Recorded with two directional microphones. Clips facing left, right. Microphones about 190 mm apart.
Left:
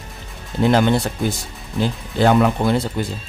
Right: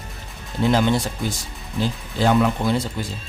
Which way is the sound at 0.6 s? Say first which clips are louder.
Left 3 dB; 60° left (ahead or behind).